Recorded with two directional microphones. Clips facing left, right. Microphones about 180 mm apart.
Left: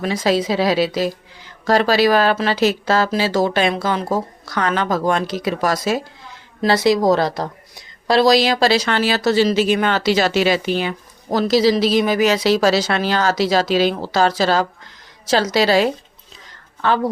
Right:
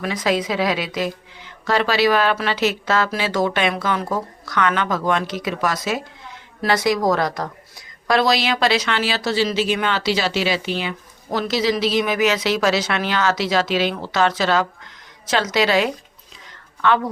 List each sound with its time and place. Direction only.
0.0 s speech: 30° left (ahead or behind)